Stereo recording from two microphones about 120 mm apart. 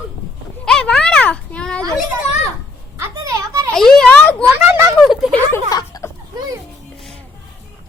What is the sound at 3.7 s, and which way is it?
Speech, 5° left (ahead or behind).